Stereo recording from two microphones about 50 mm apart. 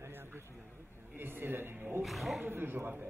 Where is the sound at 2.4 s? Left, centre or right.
Right.